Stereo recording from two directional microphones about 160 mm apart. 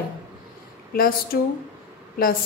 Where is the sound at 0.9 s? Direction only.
65° left (ahead or behind).